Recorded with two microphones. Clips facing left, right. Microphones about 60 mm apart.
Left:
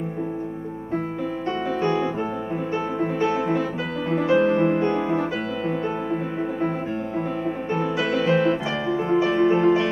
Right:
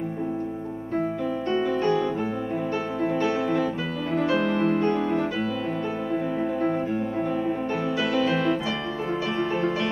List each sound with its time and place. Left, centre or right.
4.1 s music: left
8.1 s piano: left
9.1 s music: centre
9.5 s music: left